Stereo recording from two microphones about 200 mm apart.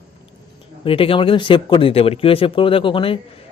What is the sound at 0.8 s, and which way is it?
Speech, 25° left (ahead or behind).